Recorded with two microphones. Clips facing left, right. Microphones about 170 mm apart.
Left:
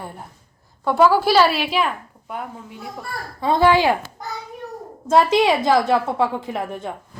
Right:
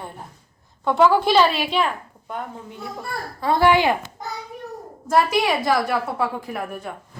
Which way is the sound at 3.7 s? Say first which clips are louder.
Left 1 dB; 20° right (ahead or behind).